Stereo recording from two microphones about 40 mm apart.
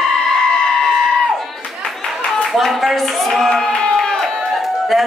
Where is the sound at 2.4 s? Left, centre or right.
Centre.